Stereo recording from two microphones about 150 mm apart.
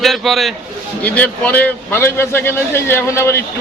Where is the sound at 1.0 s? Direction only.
10° left (ahead or behind).